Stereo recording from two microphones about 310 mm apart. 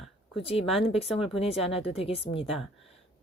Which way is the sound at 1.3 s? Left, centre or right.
Centre.